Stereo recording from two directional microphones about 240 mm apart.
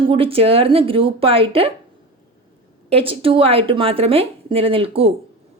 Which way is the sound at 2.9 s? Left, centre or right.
Right.